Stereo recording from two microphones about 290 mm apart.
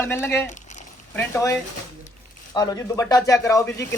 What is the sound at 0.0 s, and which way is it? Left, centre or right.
Speech, centre.